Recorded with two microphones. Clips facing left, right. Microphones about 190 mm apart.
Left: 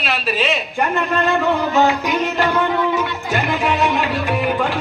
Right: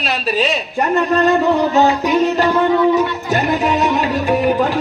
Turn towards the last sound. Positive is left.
turn(degrees=-40)  # may be behind; listen again after turning